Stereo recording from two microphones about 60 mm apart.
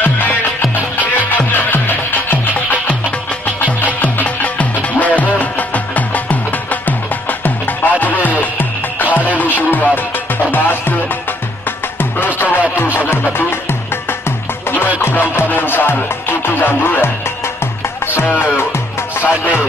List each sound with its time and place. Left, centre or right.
1.5 s music: left
12.4 s music: left
14.7 s music: left
18.1 s music: left